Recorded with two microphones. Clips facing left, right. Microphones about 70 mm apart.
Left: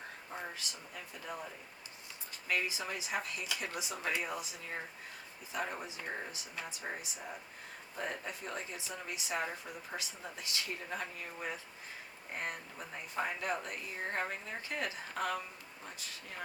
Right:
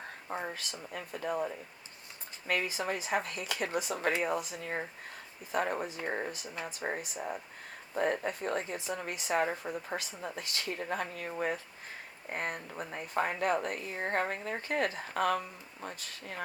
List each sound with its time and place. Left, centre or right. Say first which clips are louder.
0.5 s speech: right 5 dB; right